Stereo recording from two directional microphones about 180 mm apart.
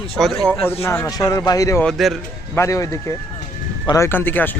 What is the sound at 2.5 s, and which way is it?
Speech, 15° left (ahead or behind).